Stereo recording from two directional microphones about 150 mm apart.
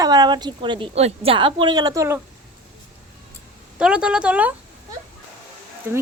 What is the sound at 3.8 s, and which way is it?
Speech, 5° right (ahead or behind).